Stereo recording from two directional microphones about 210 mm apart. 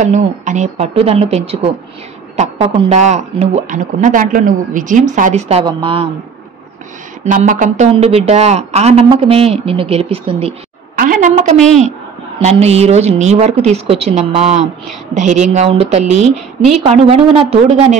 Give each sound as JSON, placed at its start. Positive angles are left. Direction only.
{"t": 0.0, "sound": "speech", "side_deg": -35}
{"t": 5.7, "sound": "speech", "side_deg": -25}
{"t": 7.2, "sound": "speech", "side_deg": -40}
{"t": 11.0, "sound": "a sound", "side_deg": -40}
{"t": 11.5, "sound": "a woman's voice", "side_deg": 0}
{"t": 12.4, "sound": "speech", "side_deg": -30}